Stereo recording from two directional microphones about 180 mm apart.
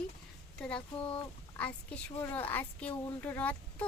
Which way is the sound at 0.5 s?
5° left (ahead or behind).